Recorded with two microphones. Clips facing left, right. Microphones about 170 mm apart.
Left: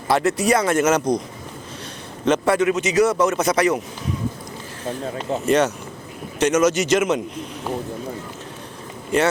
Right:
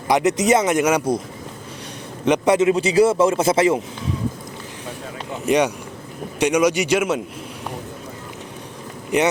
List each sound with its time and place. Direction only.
0.1 s speech: 20° right (ahead or behind)
2.2 s a man's voice: 15° right (ahead or behind)
5.5 s speech: 15° right (ahead or behind)
9.1 s speech: 15° right (ahead or behind)